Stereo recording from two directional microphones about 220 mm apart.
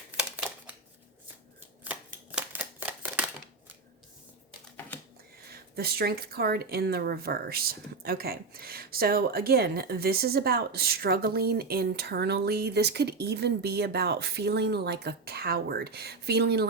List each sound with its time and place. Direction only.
0.1 s a sound: 5° right (ahead or behind)
1.8 s shuffling cards: 5° right (ahead or behind)
5.5 s speech: 45° right (ahead or behind)